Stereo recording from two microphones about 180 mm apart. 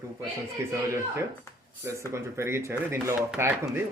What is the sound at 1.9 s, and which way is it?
Speech, 15° right (ahead or behind).